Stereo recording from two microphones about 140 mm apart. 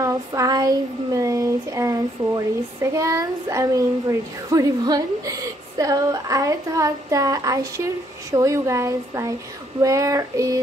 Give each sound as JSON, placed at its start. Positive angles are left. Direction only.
{"t": 0.0, "sound": "child singing", "side_deg": -25}